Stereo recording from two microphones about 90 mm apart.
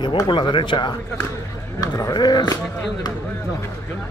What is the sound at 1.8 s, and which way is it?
Speech, 45° left (ahead or behind).